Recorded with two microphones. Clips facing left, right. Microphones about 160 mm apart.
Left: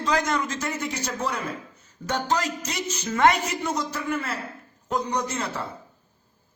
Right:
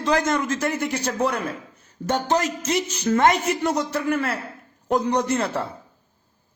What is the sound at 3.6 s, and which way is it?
A man's voice, 65° right (ahead or behind).